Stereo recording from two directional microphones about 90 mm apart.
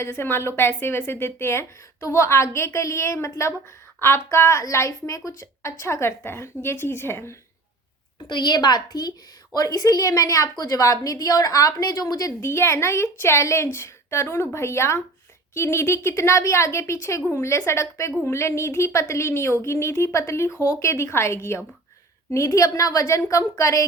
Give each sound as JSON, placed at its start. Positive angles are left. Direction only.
{"t": 0.0, "sound": "a woman's voice", "side_deg": 25}
{"t": 8.3, "sound": "a woman's voice", "side_deg": 55}
{"t": 12.4, "sound": "a woman's voice", "side_deg": 30}